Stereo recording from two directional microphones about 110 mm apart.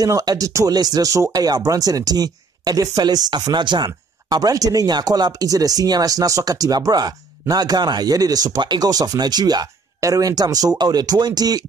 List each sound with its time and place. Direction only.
0.0 s speech: 35° right (ahead or behind)